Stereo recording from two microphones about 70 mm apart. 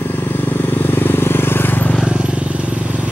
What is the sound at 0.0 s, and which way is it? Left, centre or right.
Vehicle, left.